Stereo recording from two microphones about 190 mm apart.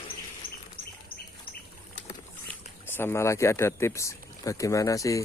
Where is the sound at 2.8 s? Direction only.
10° left (ahead or behind).